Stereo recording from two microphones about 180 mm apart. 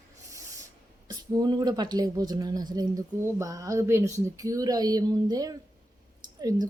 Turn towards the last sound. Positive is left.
turn(degrees=-20)  # may be behind; listen again after turning